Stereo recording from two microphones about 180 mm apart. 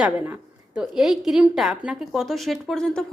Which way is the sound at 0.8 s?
5° right (ahead or behind).